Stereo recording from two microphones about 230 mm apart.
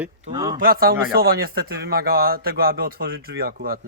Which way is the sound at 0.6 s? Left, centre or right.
Right.